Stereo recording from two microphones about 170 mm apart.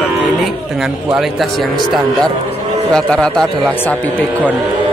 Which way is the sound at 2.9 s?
5° left (ahead or behind).